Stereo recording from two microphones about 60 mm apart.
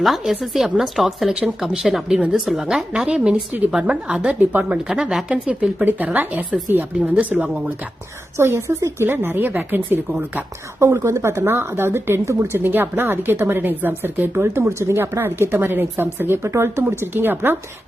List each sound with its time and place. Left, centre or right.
0.0 s speech: centre
2.9 s a woman's voice: centre
4.4 s a woman's voice: right
4.8 s a woman's voice: centre
8.4 s a woman's voice: right
9.0 s a woman's voice: right
10.8 s a woman's voice: right
12.5 s a woman's voice: right
14.3 s a woman's voice: right
16.4 s a woman's voice: right
16.9 s a woman's voice: right